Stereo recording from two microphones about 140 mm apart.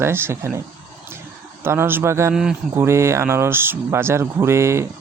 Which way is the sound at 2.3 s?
5° right (ahead or behind).